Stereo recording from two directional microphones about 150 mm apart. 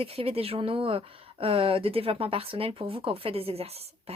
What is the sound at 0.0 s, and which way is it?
Speech, 40° right (ahead or behind).